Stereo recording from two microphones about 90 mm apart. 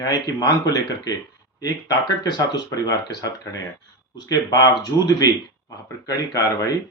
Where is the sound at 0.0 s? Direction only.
50° left (ahead or behind).